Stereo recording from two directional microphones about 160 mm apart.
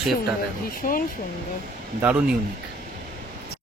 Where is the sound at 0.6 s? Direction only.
65° left (ahead or behind).